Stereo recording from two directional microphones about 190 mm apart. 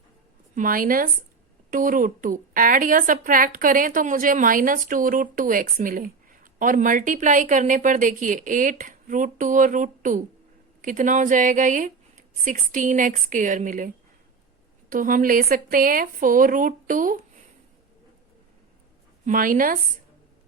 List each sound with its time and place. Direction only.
0.5 s a woman's voice: 45° right (ahead or behind)
19.2 s a woman's voice: 45° right (ahead or behind)